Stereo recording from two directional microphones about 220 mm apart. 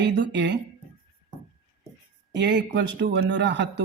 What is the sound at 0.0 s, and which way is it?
Speech, 50° right (ahead or behind).